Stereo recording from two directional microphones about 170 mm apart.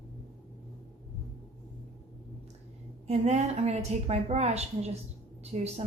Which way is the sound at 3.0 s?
40° right (ahead or behind).